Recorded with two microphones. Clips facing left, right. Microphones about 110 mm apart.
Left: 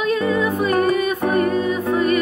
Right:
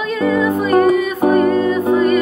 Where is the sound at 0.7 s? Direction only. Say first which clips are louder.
Right 7 dB; 25° right (ahead or behind).